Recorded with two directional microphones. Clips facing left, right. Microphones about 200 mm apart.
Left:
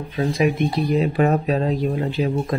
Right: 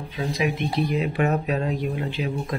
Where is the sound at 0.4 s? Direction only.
35° left (ahead or behind).